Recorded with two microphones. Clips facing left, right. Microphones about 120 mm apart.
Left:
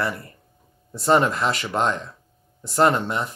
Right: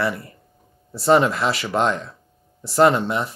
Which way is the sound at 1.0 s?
5° right (ahead or behind).